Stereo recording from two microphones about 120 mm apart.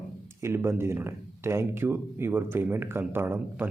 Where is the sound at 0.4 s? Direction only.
20° right (ahead or behind).